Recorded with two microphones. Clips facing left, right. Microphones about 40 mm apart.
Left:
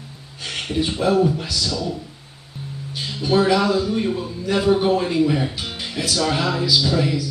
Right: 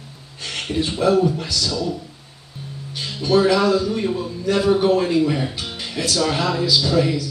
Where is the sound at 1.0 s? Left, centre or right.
Centre.